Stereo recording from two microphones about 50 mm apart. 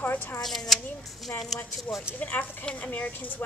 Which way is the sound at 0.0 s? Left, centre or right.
Left.